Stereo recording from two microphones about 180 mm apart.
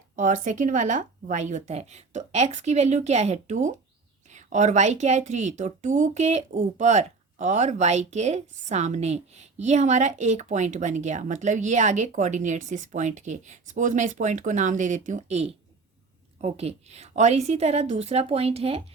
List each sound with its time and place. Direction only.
0.2 s a woman's voice: 45° right (ahead or behind)